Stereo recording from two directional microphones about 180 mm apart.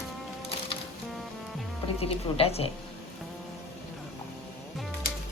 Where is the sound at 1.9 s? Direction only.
35° left (ahead or behind).